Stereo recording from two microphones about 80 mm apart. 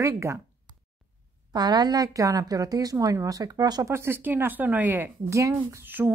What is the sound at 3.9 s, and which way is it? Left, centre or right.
Speech, right.